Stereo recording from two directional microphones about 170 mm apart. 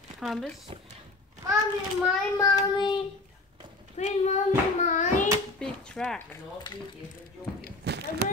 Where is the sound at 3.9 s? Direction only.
45° left (ahead or behind).